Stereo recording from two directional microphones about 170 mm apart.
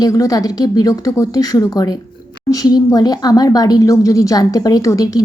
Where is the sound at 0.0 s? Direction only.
20° left (ahead or behind).